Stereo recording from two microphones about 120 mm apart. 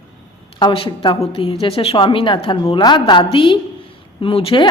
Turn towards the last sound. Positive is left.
turn(degrees=50)  # may be behind; listen again after turning